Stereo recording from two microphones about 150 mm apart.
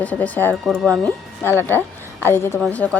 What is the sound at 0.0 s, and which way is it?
Speech, 10° left (ahead or behind).